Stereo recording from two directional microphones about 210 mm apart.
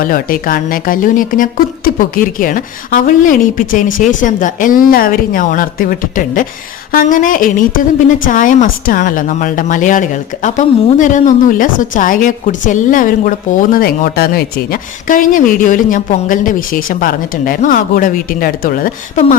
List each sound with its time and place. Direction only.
0.0 s a woman's voice: 40° left (ahead or behind)